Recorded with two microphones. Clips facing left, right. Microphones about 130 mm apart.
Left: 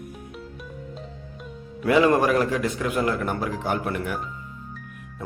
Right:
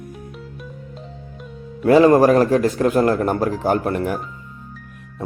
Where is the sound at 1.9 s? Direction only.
35° right (ahead or behind).